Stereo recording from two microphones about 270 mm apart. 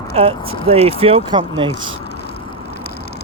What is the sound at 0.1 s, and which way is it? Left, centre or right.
Speech, right.